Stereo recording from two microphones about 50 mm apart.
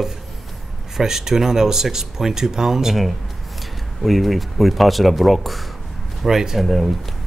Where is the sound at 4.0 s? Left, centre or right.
Centre.